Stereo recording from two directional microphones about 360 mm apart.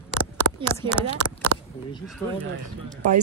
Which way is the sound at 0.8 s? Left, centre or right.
Centre.